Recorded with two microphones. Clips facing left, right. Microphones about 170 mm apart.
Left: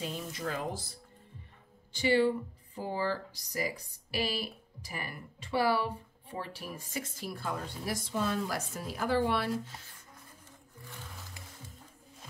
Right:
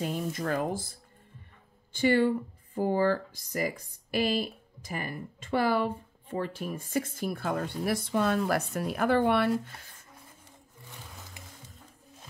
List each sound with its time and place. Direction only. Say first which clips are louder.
0.3 s speech: right 5 dB; 50° right (ahead or behind)
11.4 s music: right 1 dB; 20° right (ahead or behind)